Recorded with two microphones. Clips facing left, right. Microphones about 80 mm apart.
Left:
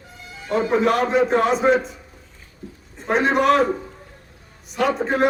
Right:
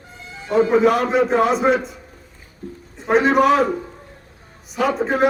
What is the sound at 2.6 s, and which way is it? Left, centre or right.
Speech, right.